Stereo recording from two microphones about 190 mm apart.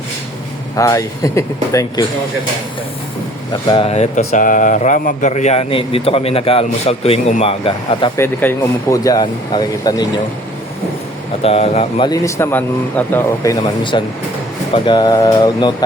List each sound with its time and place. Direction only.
0.8 s speech: 15° left (ahead or behind)
3.5 s speech: 25° left (ahead or behind)
8.1 s speech: 10° left (ahead or behind)
11.4 s speech: 35° left (ahead or behind)